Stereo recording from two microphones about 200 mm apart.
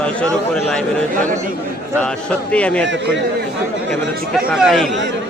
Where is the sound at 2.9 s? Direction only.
65° right (ahead or behind).